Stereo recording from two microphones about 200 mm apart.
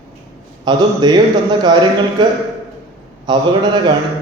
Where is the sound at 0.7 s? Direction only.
20° right (ahead or behind).